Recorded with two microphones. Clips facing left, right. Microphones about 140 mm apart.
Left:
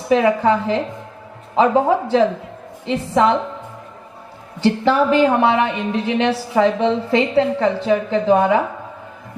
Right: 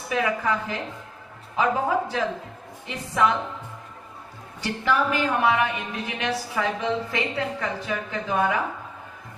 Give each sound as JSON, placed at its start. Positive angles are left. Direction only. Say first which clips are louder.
{"t": 0.1, "sound": "a woman's voice", "louder": "left 10 dB", "side_deg": 30}
{"t": 4.6, "sound": "a woman's voice", "louder": "left 9 dB", "side_deg": 30}